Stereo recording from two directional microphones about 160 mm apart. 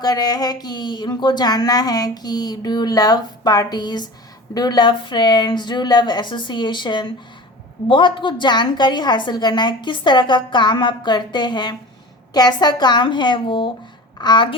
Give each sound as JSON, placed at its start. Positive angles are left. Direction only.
{"t": 0.0, "sound": "speech", "side_deg": 25}